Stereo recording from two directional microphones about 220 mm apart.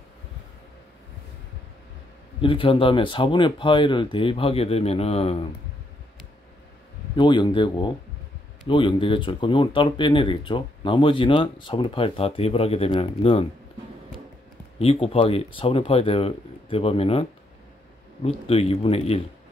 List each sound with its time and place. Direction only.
2.4 s speech: 25° left (ahead or behind)
7.2 s speech: 20° left (ahead or behind)
14.8 s speech: 25° left (ahead or behind)